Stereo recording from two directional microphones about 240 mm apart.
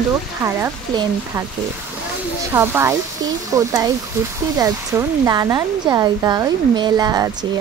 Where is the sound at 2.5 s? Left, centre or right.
Centre.